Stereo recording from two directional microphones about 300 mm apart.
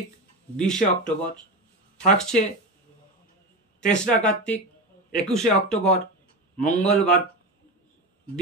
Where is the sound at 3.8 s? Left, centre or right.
Centre.